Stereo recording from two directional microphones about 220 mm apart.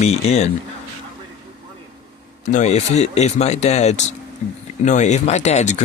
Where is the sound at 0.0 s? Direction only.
30° left (ahead or behind).